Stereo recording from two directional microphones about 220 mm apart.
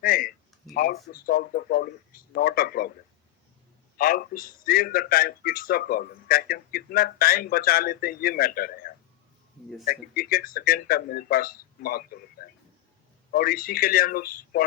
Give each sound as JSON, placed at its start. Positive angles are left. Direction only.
{"t": 0.0, "sound": "a man's voice", "side_deg": 40}
{"t": 3.9, "sound": "a man's voice", "side_deg": 40}
{"t": 12.4, "sound": "a sound", "side_deg": 45}
{"t": 13.3, "sound": "speech", "side_deg": 45}